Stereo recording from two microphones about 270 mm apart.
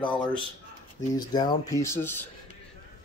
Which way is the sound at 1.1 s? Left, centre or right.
Centre.